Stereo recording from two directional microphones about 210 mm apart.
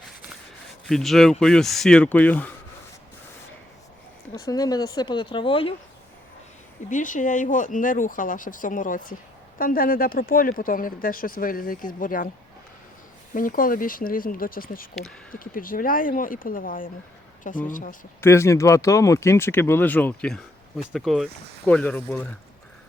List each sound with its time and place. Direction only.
0.9 s speech: centre (ahead or behind)
4.4 s speech: 20° left (ahead or behind)
6.9 s speech: 40° left (ahead or behind)
13.3 s speech: 40° left (ahead or behind)
18.2 s speech: 10° left (ahead or behind)